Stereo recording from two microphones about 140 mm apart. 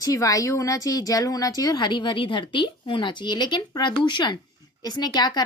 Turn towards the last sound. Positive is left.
turn(degrees=30)  # may be behind; listen again after turning